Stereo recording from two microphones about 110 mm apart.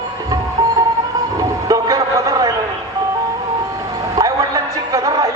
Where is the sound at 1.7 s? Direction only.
30° right (ahead or behind).